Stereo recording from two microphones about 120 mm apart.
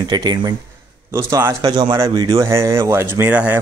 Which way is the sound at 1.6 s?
35° right (ahead or behind).